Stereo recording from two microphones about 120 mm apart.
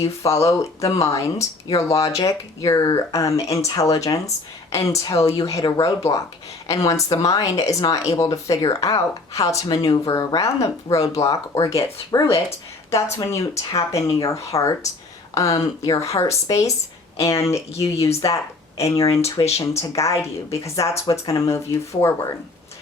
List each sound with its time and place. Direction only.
0.0 s speech: 25° left (ahead or behind); by 18.4 s 45° left (ahead or behind)
19.1 s speech: 25° left (ahead or behind)